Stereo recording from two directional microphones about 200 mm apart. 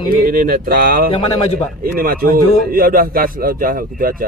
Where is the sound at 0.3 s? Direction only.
45° right (ahead or behind).